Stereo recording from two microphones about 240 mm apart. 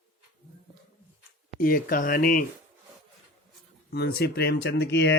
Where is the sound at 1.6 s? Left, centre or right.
Left.